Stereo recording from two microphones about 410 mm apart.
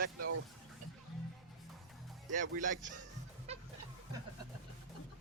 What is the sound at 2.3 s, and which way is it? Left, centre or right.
Speech, centre.